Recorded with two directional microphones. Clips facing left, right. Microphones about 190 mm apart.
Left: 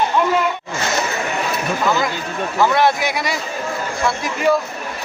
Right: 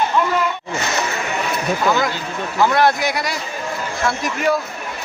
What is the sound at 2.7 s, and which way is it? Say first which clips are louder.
Speech: even; centre (ahead or behind).